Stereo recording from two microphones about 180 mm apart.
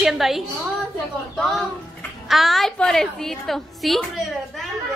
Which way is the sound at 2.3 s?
Centre (ahead or behind).